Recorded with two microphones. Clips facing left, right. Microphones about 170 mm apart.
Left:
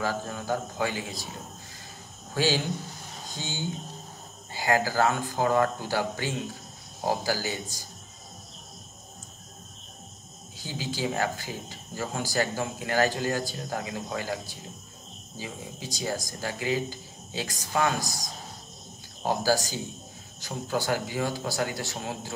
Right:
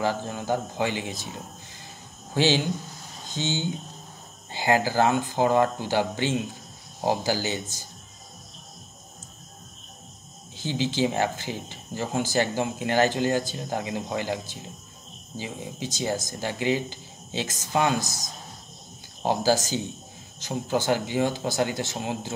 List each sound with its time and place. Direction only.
0.0 s speech: 25° right (ahead or behind)
2.3 s speech: 25° right (ahead or behind)
10.6 s speech: 25° right (ahead or behind)
19.2 s speech: 20° right (ahead or behind)